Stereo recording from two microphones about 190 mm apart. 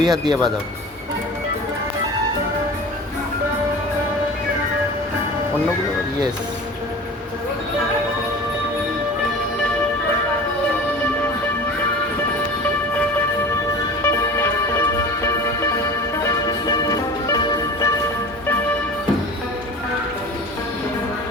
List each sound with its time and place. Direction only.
0.0 s speech: 20° right (ahead or behind)
14.0 s music: 15° left (ahead or behind)